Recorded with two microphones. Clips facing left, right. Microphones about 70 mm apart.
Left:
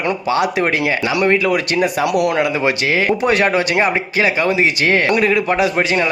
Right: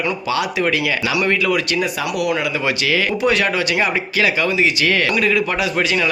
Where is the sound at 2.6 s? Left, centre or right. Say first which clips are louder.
Left 3 dB; left.